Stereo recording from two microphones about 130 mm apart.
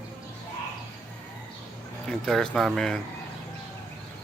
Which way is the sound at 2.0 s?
5° left (ahead or behind).